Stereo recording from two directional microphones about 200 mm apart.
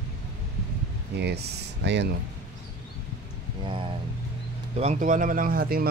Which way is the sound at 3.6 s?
25° right (ahead or behind).